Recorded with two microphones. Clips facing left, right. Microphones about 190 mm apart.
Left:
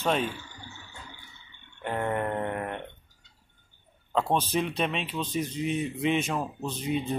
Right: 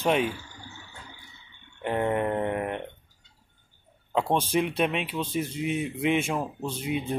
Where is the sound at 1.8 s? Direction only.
15° right (ahead or behind).